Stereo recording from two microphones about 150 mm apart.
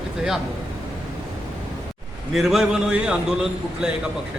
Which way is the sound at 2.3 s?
Centre (ahead or behind).